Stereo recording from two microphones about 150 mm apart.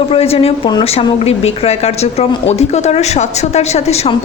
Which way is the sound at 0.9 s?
45° left (ahead or behind).